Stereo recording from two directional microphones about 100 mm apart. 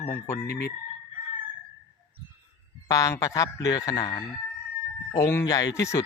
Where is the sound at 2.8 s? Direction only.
35° left (ahead or behind).